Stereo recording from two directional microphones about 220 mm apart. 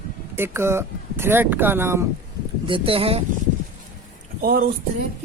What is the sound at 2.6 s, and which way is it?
Speech, 25° right (ahead or behind).